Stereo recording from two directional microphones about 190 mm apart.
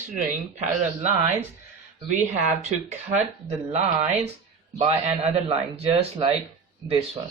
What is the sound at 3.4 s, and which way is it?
Speech, 35° right (ahead or behind).